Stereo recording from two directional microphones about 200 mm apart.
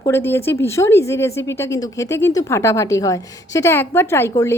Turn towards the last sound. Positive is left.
turn(degrees=10)  # may be behind; listen again after turning